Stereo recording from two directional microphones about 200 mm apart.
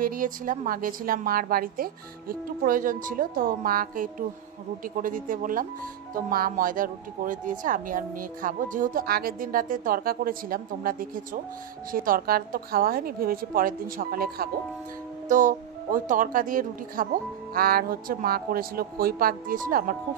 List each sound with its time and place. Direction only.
0.0 s speech: 40° right (ahead or behind)